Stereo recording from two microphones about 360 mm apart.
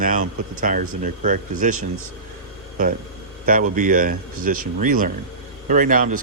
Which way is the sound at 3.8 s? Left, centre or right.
Right.